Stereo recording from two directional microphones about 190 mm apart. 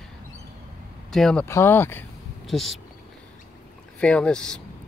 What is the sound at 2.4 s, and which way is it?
Speech, centre (ahead or behind).